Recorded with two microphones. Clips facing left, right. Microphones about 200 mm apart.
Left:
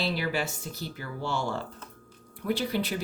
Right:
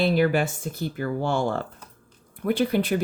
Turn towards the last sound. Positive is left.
turn(degrees=-55)  # may be behind; listen again after turning